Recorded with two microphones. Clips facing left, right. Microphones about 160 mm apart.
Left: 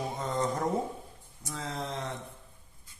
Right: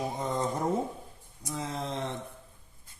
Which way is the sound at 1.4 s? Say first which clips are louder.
Right 2 dB; 20° right (ahead or behind).